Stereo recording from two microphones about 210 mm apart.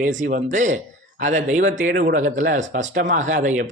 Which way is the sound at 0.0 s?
35° right (ahead or behind).